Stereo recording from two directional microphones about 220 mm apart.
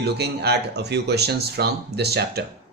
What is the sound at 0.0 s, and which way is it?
Speech, 45° right (ahead or behind).